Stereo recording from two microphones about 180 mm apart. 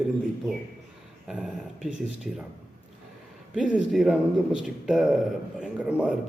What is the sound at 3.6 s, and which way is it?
Speech, 5° right (ahead or behind).